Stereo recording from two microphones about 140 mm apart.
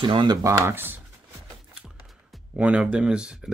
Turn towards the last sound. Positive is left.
turn(degrees=-5)  # may be behind; listen again after turning